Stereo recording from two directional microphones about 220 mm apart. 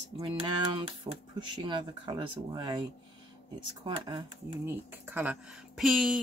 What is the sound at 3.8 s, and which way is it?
Speech, 20° right (ahead or behind).